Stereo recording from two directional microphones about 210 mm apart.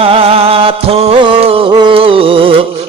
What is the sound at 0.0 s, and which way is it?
Music, 25° right (ahead or behind).